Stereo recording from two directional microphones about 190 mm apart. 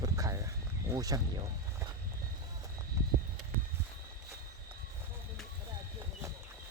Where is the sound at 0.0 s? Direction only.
20° right (ahead or behind).